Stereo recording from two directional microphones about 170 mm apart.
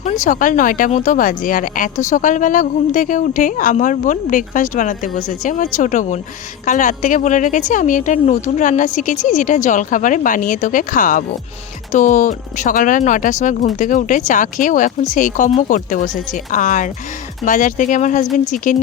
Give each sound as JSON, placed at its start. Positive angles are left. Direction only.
{"t": 0.0, "sound": "speech", "side_deg": 50}